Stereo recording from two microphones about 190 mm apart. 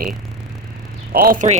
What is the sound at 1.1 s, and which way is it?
Speech, 50° right (ahead or behind).